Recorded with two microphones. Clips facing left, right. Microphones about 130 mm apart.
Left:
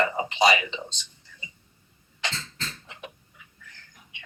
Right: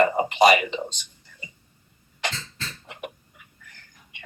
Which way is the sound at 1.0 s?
50° right (ahead or behind).